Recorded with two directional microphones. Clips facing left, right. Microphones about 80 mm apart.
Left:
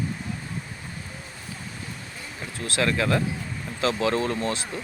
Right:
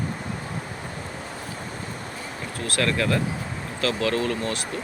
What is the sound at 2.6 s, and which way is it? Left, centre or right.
Speech, centre.